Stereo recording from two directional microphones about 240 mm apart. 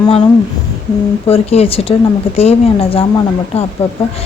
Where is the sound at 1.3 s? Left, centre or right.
Left.